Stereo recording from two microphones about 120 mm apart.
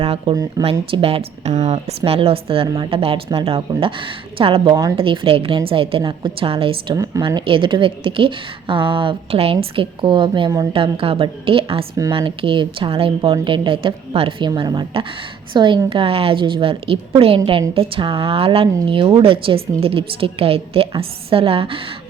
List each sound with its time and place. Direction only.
0.0 s a woman's voice: 55° right (ahead or behind)
6.9 s a woman's voice: 30° right (ahead or behind)
7.2 s a woman's voice: 45° right (ahead or behind)